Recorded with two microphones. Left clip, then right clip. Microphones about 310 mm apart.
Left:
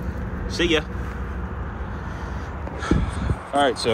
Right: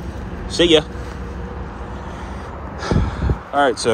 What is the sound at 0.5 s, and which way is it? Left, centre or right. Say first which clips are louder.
Speech: right 8 dB; centre.